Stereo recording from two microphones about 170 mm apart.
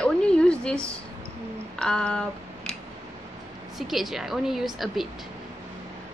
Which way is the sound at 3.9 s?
Centre (ahead or behind).